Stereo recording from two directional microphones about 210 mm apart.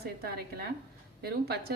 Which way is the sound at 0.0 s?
50° right (ahead or behind).